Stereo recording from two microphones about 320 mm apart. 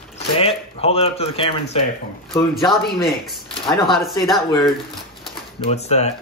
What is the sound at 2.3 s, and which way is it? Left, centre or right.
A woman's voice, centre.